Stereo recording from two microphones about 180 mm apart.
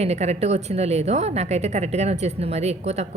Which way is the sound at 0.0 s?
35° right (ahead or behind).